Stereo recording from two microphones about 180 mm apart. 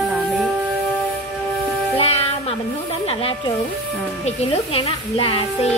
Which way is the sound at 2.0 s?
35° left (ahead or behind).